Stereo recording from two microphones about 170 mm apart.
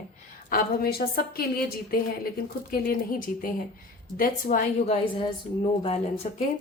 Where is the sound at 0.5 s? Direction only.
65° left (ahead or behind).